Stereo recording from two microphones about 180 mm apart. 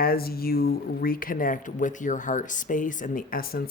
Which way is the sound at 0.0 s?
55° left (ahead or behind).